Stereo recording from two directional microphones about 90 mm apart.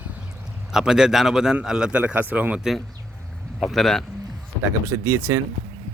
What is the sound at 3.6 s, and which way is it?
Speech, 5° left (ahead or behind).